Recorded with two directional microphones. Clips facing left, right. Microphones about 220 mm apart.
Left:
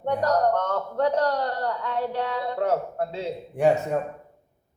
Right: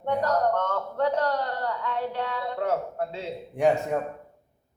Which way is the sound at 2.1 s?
40° left (ahead or behind).